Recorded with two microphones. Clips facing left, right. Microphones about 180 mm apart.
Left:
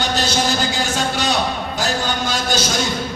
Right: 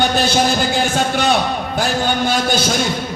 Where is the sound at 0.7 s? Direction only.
55° right (ahead or behind).